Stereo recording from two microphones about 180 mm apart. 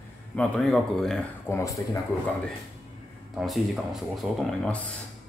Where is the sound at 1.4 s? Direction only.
15° left (ahead or behind).